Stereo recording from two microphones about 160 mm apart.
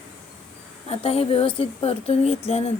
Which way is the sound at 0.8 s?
40° left (ahead or behind).